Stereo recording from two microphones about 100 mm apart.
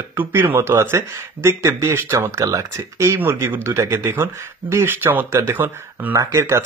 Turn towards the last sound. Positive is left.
turn(degrees=-25)  # may be behind; listen again after turning